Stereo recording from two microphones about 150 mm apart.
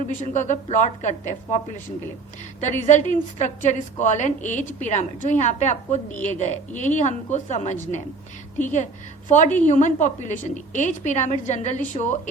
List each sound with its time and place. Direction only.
0.2 s a woman's voice: 55° left (ahead or behind)